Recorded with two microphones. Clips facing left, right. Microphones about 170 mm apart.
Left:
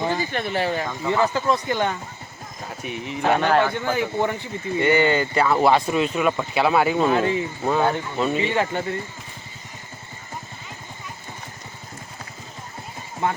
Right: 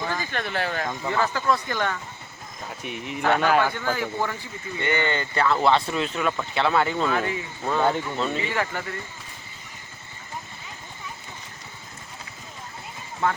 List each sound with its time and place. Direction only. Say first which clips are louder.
0.0 s speech: left 5 dB; 15° left (ahead or behind)
2.8 s speech: left 3 dB; centre (ahead or behind)
3.8 s speech: left 4 dB; 20° left (ahead or behind)
13.2 s speech: left 1 dB; 20° left (ahead or behind)